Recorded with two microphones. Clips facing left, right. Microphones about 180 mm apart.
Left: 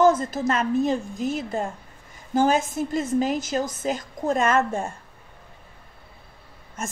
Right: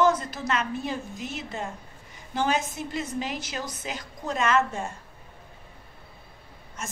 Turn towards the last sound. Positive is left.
turn(degrees=50)  # may be behind; listen again after turning